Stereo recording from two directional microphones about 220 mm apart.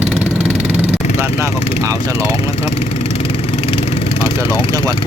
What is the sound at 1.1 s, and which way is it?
Vehicle, 10° right (ahead or behind).